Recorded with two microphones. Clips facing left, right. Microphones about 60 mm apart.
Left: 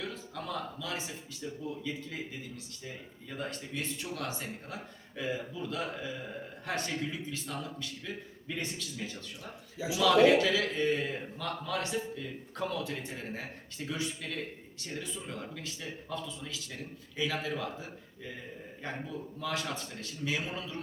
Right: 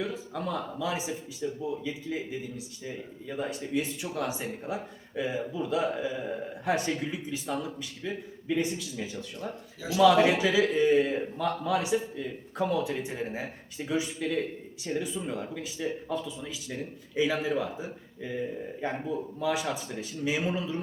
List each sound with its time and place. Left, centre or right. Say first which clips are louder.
0.0 s a man's voice: right 7 dB; centre